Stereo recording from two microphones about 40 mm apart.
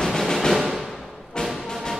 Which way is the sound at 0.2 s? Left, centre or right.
Centre.